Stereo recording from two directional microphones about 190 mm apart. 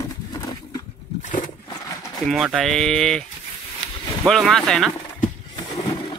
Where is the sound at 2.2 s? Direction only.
Centre (ahead or behind).